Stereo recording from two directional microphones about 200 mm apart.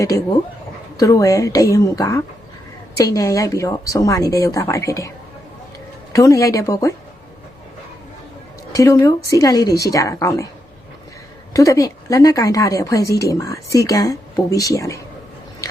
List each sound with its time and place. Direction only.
0.9 s a woman's voice: 15° left (ahead or behind)
6.1 s a woman's voice: 15° left (ahead or behind)
8.7 s a woman's voice: 15° left (ahead or behind)
11.5 s a woman's voice: 15° left (ahead or behind)